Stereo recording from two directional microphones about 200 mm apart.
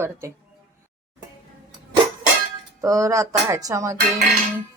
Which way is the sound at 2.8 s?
15° right (ahead or behind).